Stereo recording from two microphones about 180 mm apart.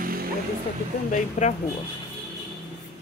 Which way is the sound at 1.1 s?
40° left (ahead or behind).